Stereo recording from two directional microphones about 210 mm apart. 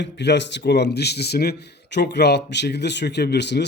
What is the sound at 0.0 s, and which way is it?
Speech, 55° left (ahead or behind).